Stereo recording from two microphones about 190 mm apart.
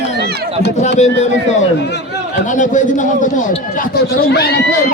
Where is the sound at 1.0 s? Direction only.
35° left (ahead or behind); by 4.6 s 55° left (ahead or behind).